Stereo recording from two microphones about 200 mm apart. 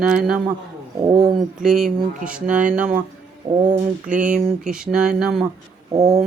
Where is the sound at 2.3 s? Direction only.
5° right (ahead or behind).